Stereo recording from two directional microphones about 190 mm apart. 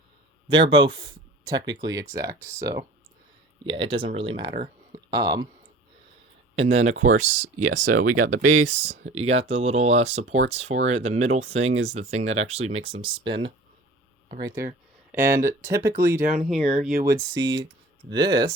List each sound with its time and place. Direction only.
0.5 s speech: 25° right (ahead or behind)
6.6 s speech: 35° right (ahead or behind)
14.4 s speech: 15° right (ahead or behind)
17.1 s speech: 15° right (ahead or behind)